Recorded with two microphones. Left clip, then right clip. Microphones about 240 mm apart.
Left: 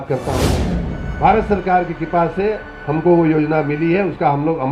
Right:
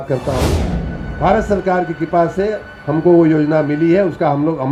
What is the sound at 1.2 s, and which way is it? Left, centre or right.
A man's voice, right.